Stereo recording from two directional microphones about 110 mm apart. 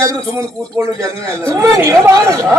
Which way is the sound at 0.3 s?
30° right (ahead or behind).